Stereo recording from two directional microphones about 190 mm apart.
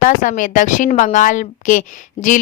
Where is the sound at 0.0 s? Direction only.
40° left (ahead or behind).